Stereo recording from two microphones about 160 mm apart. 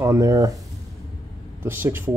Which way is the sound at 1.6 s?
15° right (ahead or behind).